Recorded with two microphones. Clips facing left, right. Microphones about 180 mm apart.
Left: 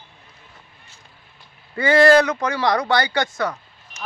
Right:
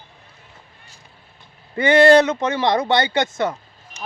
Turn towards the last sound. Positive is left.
turn(degrees=-25)  # may be behind; listen again after turning